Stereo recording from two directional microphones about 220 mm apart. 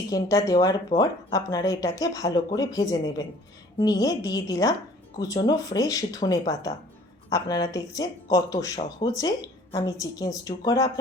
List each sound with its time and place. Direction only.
0.1 s speech: 15° left (ahead or behind)